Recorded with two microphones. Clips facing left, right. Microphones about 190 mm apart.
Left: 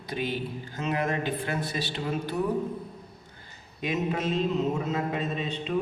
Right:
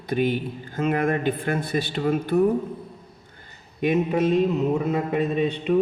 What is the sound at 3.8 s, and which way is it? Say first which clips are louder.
A man's voice: right 7 dB; 55° right (ahead or behind).